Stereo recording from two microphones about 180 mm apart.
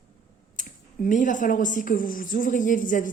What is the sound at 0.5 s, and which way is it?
A woman's voice, 45° left (ahead or behind).